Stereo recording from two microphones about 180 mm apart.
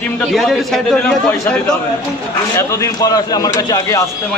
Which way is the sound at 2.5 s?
15° left (ahead or behind).